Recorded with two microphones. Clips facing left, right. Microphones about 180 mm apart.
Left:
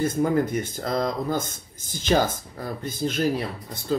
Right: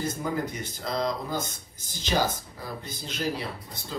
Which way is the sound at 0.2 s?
50° left (ahead or behind).